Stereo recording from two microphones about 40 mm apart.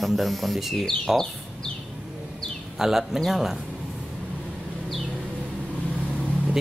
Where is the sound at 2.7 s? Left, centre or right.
Centre.